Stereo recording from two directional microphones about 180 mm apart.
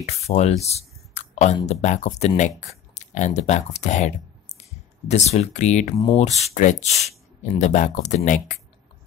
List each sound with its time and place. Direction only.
0.0 s speech: 40° left (ahead or behind)